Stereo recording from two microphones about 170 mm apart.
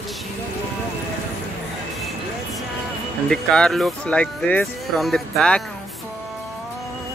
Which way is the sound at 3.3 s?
5° left (ahead or behind).